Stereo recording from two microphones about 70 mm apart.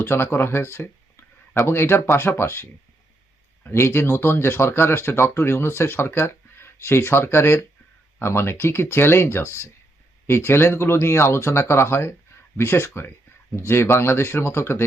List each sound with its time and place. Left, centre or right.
0.0 s speech: left
3.7 s speech: left